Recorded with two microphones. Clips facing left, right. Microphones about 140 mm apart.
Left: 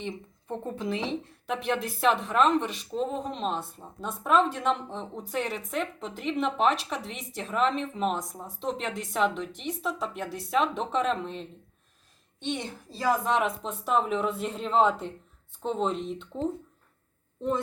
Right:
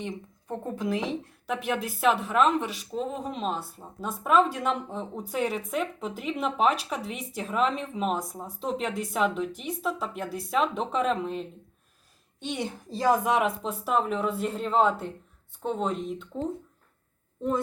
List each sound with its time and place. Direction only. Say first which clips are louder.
0.4 s a child's voice: right 1 dB; centre (ahead or behind)
12.6 s a woman's voice: right 5 dB; 20° right (ahead or behind)
13.3 s speech: right 1 dB; 5° right (ahead or behind)